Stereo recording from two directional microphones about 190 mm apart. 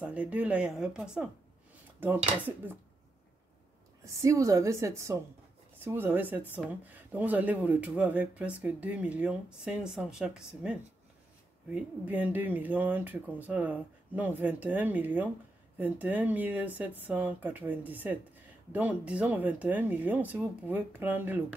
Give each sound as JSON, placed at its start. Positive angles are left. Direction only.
{"t": 0.0, "sound": "speech", "side_deg": -5}
{"t": 4.0, "sound": "speech", "side_deg": -15}